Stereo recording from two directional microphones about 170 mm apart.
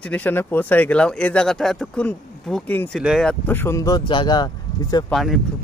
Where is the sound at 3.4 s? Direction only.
15° left (ahead or behind).